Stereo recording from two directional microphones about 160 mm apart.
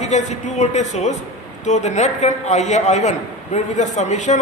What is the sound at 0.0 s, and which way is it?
A man's voice, 50° left (ahead or behind).